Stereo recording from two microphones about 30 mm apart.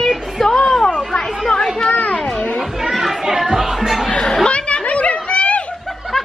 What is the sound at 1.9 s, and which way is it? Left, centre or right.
Children playing, left.